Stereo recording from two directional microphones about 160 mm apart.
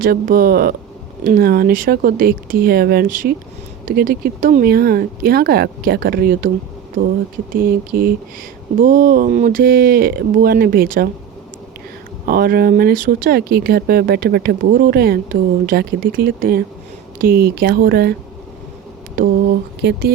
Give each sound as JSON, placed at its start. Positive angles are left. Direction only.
{"t": 0.0, "sound": "speech", "side_deg": -65}
{"t": 7.5, "sound": "speech", "side_deg": -65}
{"t": 12.3, "sound": "speech", "side_deg": -70}
{"t": 19.8, "sound": "speech", "side_deg": -90}